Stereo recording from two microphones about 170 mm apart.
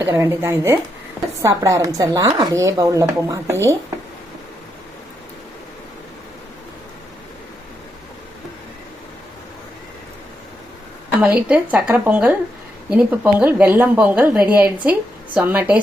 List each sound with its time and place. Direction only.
0.0 s a woman's voice: 15° right (ahead or behind)
11.2 s a woman's voice: 5° right (ahead or behind)